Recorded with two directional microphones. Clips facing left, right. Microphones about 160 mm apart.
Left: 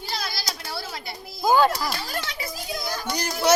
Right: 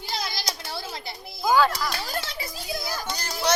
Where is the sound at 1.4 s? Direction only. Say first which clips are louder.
Left 2 dB; 20° left (ahead or behind).